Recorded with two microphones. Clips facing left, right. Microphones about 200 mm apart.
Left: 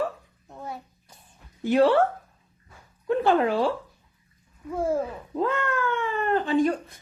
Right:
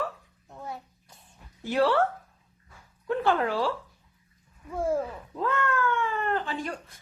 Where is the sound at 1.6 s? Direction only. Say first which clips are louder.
Left 5 dB; 20° left (ahead or behind).